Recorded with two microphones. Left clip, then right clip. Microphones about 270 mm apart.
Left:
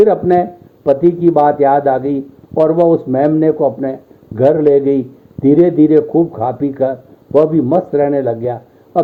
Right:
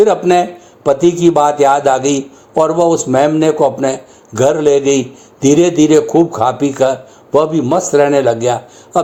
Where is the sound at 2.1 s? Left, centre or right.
Right.